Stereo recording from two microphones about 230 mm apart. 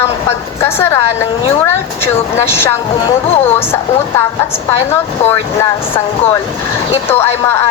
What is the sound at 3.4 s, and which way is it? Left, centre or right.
Speech, centre.